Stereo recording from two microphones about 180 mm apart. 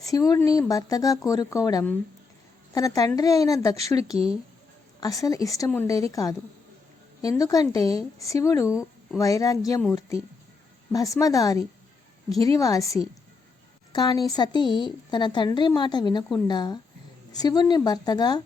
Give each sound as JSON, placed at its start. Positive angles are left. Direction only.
{"t": 0.0, "sound": "a woman's voice", "side_deg": 20}
{"t": 4.9, "sound": "a woman's voice", "side_deg": 20}
{"t": 10.9, "sound": "a woman's voice", "side_deg": 20}
{"t": 13.9, "sound": "a woman's voice", "side_deg": 20}